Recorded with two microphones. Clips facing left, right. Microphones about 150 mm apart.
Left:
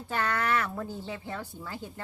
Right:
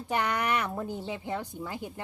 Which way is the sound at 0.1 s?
15° right (ahead or behind).